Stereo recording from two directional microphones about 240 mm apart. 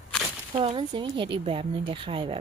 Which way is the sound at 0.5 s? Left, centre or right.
Right.